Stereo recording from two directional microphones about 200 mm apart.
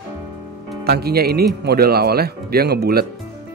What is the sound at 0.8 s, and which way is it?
Speech, 50° right (ahead or behind).